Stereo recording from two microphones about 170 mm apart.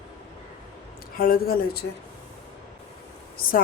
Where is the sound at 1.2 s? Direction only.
60° left (ahead or behind).